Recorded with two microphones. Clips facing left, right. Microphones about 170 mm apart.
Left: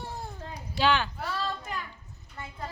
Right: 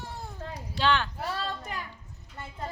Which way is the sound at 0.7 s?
5° left (ahead or behind).